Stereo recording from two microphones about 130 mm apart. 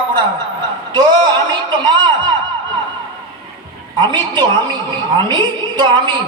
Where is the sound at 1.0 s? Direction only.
35° right (ahead or behind).